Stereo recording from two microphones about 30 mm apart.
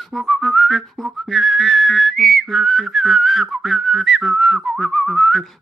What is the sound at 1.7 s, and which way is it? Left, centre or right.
Whistling, centre.